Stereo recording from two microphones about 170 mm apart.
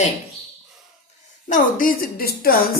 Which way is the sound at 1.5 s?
50° left (ahead or behind).